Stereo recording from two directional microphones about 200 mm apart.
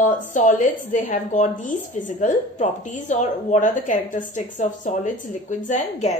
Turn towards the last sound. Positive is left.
turn(degrees=35)  # may be behind; listen again after turning